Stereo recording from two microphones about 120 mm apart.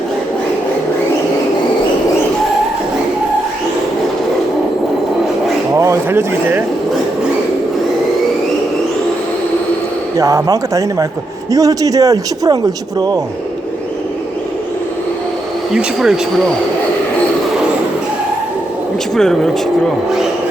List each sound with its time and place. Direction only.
5.7 s a sound: 25° right (ahead or behind)
10.2 s a man's voice: 30° right (ahead or behind)
15.7 s speech: 5° right (ahead or behind)
19.1 s speech: 5° left (ahead or behind)